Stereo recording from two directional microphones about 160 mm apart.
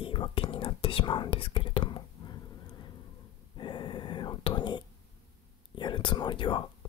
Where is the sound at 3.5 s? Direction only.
30° left (ahead or behind).